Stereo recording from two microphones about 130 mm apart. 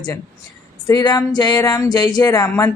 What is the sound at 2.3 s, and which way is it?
Speech, 20° left (ahead or behind).